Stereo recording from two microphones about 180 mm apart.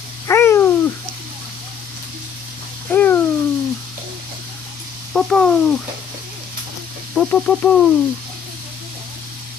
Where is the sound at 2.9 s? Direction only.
10° left (ahead or behind).